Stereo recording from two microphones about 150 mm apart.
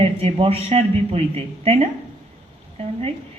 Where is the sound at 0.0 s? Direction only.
40° right (ahead or behind).